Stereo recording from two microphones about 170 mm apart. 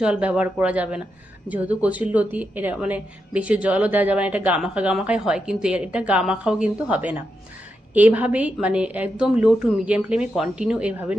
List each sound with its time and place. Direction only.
0.0 s a woman's voice: 5° right (ahead or behind)